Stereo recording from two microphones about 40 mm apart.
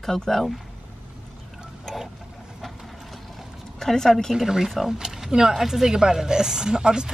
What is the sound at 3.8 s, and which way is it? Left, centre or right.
Speech, centre.